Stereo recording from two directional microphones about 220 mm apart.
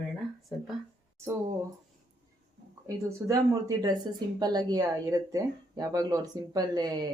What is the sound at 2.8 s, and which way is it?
Speech, 15° right (ahead or behind).